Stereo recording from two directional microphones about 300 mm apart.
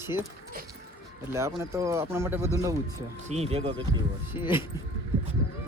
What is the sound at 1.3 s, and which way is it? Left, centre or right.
Speech, centre.